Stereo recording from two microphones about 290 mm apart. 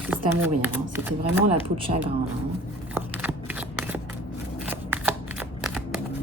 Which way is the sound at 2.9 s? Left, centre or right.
Centre.